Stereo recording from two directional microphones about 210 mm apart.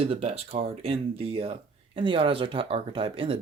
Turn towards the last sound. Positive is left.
turn(degrees=-25)  # may be behind; listen again after turning